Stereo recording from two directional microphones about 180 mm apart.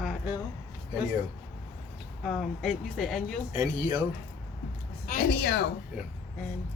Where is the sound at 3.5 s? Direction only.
20° right (ahead or behind).